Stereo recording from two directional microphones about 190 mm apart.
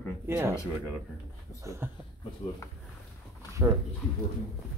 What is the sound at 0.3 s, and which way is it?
Speech, 15° right (ahead or behind).